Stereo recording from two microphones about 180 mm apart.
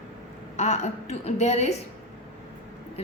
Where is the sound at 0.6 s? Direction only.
40° left (ahead or behind).